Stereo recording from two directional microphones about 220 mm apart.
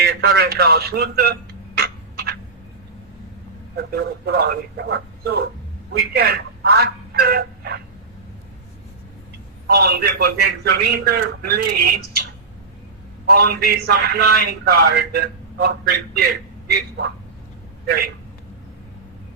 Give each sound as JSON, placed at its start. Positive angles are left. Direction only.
{"t": 0.0, "sound": "a man's voice", "side_deg": -45}
{"t": 3.8, "sound": "a man's voice", "side_deg": -45}
{"t": 9.6, "sound": "a man's voice", "side_deg": -45}
{"t": 13.3, "sound": "a man's voice", "side_deg": -45}
{"t": 17.8, "sound": "a man's voice", "side_deg": -45}